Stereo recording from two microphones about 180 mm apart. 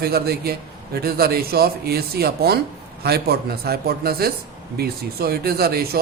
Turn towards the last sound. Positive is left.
turn(degrees=-60)  # may be behind; listen again after turning